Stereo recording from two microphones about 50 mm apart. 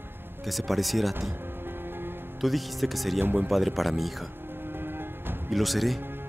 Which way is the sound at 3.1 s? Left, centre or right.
Right.